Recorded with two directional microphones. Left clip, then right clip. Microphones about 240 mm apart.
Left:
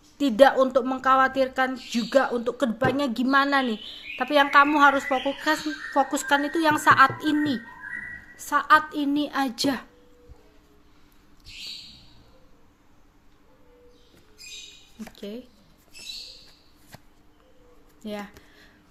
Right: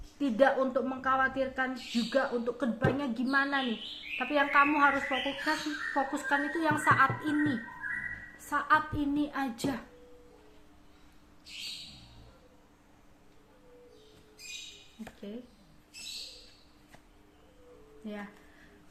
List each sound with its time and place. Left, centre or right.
0.2 s a woman's voice: left
18.0 s speech: left